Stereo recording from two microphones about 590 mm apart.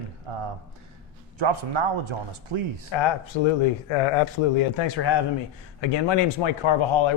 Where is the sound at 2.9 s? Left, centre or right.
Left.